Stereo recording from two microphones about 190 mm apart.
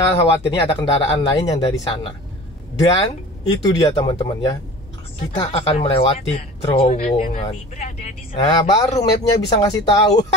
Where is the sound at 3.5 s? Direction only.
20° left (ahead or behind); by 8.1 s 35° left (ahead or behind).